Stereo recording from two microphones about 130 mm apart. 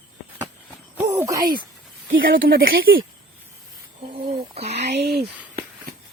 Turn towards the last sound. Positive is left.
turn(degrees=-55)  # may be behind; listen again after turning